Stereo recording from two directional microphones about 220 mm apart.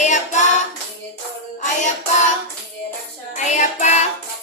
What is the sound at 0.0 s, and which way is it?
Child singing, 35° left (ahead or behind).